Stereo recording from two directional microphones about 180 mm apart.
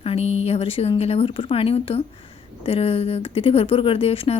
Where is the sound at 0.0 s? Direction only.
35° left (ahead or behind).